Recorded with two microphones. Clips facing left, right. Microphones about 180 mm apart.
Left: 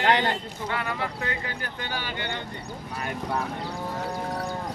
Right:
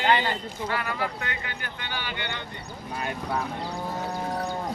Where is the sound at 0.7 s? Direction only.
25° left (ahead or behind); by 2.4 s 40° left (ahead or behind).